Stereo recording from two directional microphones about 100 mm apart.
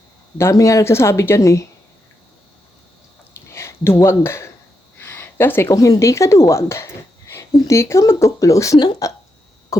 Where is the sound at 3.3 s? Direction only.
30° left (ahead or behind).